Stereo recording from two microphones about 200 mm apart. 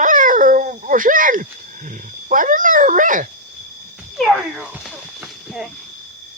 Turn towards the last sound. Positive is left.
turn(degrees=0)  # may be behind; listen again after turning